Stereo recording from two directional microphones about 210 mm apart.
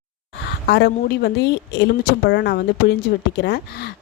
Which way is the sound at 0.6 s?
50° left (ahead or behind).